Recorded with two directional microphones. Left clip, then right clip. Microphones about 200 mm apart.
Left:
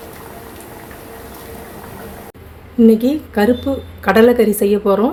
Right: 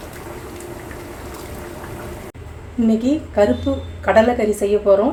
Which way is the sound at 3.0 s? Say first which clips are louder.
Even; 45° left (ahead or behind).